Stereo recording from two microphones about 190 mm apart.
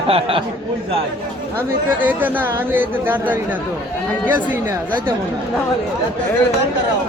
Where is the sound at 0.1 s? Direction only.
30° right (ahead or behind).